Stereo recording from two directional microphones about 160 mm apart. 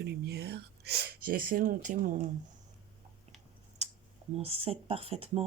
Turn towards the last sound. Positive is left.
turn(degrees=-35)  # may be behind; listen again after turning